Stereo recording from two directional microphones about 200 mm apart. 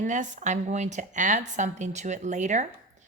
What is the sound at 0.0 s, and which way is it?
A woman's voice, 40° right (ahead or behind).